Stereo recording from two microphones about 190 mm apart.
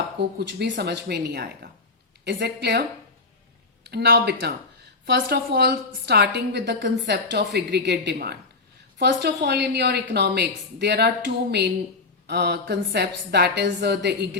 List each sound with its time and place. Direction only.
0.3 s a woman's voice: 60° right (ahead or behind)
3.8 s a woman's voice: 60° right (ahead or behind)
12.3 s a woman's voice: 60° right (ahead or behind)